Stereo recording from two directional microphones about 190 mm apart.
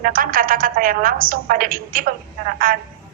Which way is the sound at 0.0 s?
45° right (ahead or behind).